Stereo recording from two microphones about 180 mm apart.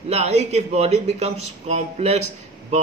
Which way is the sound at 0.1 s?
35° right (ahead or behind).